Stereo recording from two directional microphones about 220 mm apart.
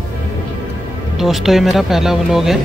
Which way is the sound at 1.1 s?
Centre (ahead or behind).